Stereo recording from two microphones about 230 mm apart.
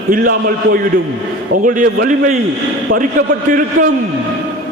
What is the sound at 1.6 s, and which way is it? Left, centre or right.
A man's voice, right.